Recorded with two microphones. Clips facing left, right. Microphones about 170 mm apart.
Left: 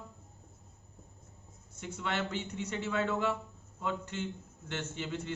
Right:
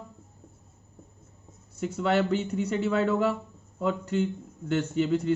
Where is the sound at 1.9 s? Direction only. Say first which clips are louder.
Right 11 dB; 40° right (ahead or behind).